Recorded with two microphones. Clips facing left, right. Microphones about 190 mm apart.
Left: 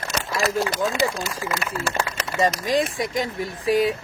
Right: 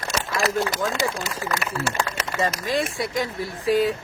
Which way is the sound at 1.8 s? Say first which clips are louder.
Even; 10° left (ahead or behind).